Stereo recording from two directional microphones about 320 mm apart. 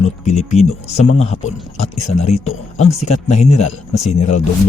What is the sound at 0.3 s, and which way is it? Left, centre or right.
Speech, left.